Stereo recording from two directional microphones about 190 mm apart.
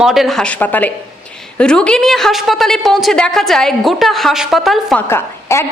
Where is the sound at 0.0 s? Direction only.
Centre (ahead or behind).